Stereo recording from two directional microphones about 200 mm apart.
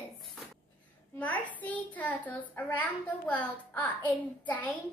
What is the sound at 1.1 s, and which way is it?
A woman's voice, 5° left (ahead or behind).